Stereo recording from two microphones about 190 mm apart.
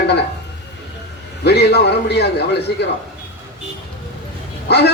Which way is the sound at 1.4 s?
60° left (ahead or behind).